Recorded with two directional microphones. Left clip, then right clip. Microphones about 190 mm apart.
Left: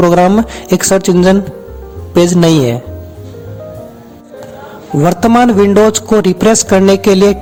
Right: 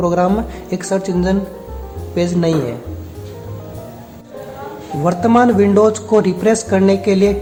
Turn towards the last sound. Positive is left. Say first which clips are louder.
# left 6 dB
turn(degrees=40)  # may be behind; listen again after turning